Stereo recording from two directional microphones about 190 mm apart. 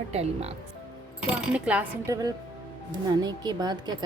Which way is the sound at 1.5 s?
5° right (ahead or behind).